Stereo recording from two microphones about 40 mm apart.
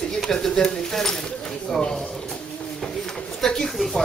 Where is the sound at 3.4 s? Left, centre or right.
Centre.